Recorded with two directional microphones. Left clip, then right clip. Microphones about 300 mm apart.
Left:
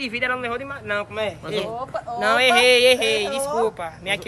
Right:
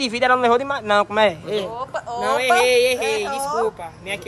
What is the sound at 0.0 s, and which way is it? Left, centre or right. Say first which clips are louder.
Speech: right 7 dB; centre.